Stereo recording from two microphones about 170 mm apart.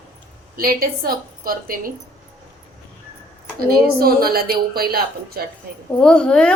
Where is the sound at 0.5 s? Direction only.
60° right (ahead or behind).